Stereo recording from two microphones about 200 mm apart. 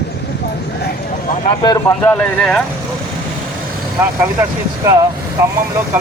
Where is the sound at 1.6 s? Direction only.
20° left (ahead or behind).